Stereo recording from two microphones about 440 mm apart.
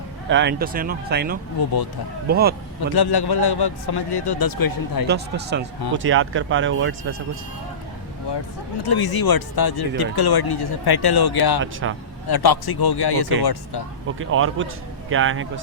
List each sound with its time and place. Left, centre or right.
0.3 s speech: right
1.6 s speech: left
2.3 s speech: right
2.9 s a man's voice: left
5.0 s speech: right
8.9 s a man's voice: left
11.6 s speech: right
12.3 s a man's voice: left
14.2 s speech: right